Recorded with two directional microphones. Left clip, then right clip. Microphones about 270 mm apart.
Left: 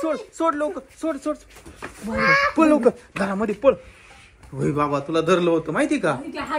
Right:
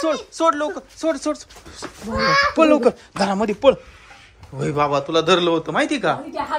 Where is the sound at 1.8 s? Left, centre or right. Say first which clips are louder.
Right 2 dB; right.